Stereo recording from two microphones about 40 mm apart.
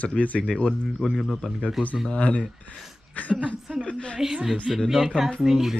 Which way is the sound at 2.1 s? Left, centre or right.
Left.